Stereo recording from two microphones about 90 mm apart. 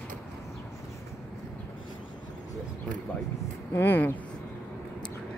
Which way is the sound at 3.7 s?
25° left (ahead or behind).